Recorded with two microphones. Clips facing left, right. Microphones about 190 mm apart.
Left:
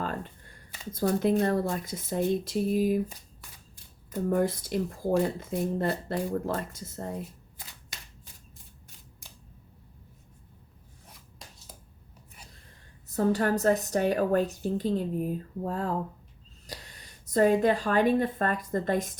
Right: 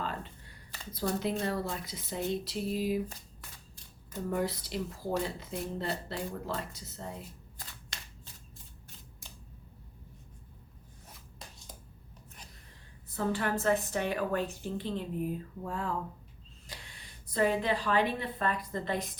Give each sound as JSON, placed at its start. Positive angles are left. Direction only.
{"t": 0.0, "sound": "computer keyboard", "side_deg": 45}
{"t": 0.9, "sound": "speech", "side_deg": 50}
{"t": 4.3, "sound": "speech", "side_deg": 50}
{"t": 13.1, "sound": "a woman's voice", "side_deg": 40}